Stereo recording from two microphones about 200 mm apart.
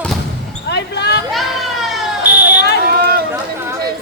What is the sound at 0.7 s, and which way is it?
Basketball bounce, 60° left (ahead or behind).